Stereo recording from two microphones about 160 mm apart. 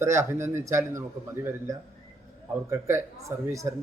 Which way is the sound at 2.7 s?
15° right (ahead or behind).